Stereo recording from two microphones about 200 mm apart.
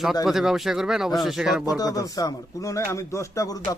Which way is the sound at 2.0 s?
15° left (ahead or behind).